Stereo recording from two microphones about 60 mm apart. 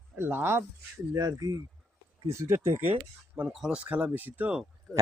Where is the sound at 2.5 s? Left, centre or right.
Right.